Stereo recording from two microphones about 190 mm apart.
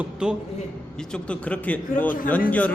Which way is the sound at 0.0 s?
5° right (ahead or behind).